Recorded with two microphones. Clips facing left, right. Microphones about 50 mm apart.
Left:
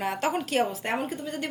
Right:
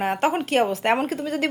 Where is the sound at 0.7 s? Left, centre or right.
Right.